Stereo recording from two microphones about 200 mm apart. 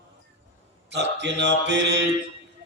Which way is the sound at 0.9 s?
60° right (ahead or behind).